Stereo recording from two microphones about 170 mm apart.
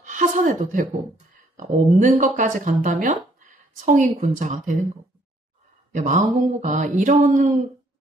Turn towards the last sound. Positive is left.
turn(degrees=-50)  # may be behind; listen again after turning